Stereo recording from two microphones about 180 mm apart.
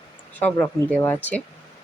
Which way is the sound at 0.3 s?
10° left (ahead or behind).